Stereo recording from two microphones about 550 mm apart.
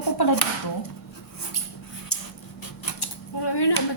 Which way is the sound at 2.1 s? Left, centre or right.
Left.